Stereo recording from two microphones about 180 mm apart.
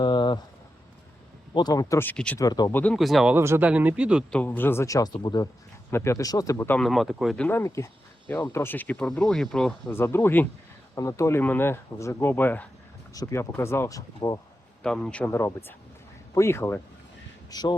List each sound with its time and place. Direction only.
0.0 s a sound: 25° left (ahead or behind)
1.5 s speech: 20° left (ahead or behind)
2.4 s speech: 20° left (ahead or behind)
2.7 s speech: 5° left (ahead or behind)
3.3 s speech: 15° right (ahead or behind)
4.3 s speech: 10° left (ahead or behind)
9.9 s speech: 15° left (ahead or behind)
14.8 s speech: 5° left (ahead or behind); by 17.7 s 25° left (ahead or behind)